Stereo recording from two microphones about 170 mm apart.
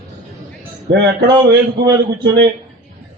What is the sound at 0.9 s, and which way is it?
A man's voice, 70° right (ahead or behind).